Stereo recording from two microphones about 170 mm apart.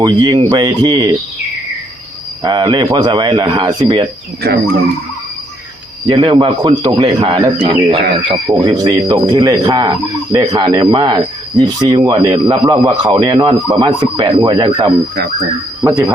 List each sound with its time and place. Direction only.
0.0 s speech: 25° right (ahead or behind)
2.4 s speech: 25° right (ahead or behind)
4.4 s fowl: 65° right (ahead or behind)
6.1 s speech: 30° right (ahead or behind)
15.8 s speech: 15° right (ahead or behind)